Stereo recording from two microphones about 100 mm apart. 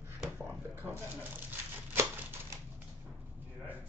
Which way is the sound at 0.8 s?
20° right (ahead or behind).